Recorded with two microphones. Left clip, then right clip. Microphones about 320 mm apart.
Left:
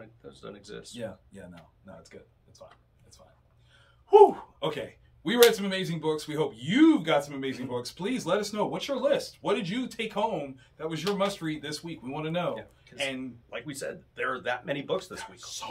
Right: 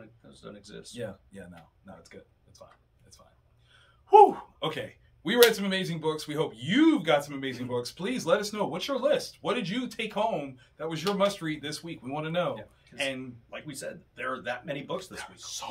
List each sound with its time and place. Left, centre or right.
0.3 s speech: centre
0.9 s a man's voice: centre
4.1 s a man's voice: centre
13.5 s speech: centre
15.1 s a man's voice: centre